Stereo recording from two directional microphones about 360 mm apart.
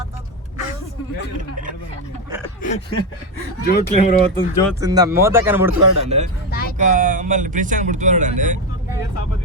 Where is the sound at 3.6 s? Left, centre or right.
Left.